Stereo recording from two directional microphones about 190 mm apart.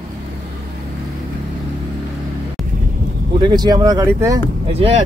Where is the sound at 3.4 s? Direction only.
20° right (ahead or behind).